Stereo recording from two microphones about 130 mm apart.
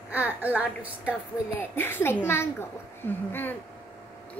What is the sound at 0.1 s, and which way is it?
A woman's voice, 10° right (ahead or behind).